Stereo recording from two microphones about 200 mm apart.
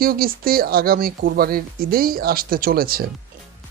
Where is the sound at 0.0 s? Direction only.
45° right (ahead or behind).